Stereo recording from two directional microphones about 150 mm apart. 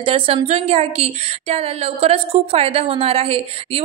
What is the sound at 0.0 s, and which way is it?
A woman's voice, 40° right (ahead or behind).